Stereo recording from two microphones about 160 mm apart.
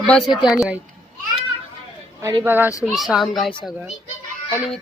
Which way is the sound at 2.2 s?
20° right (ahead or behind).